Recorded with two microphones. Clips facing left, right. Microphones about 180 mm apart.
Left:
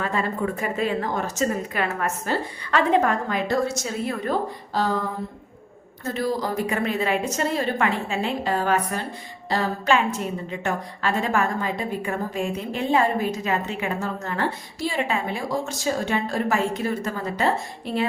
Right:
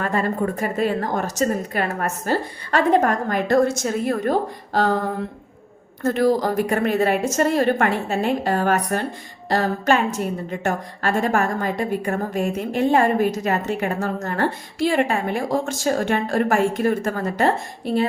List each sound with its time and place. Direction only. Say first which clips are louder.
0.0 s a woman's voice: right 3 dB; 45° right (ahead or behind)